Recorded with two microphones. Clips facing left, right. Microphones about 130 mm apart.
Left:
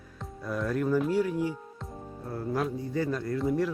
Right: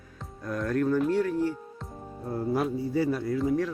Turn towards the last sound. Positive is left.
turn(degrees=0)  # may be behind; listen again after turning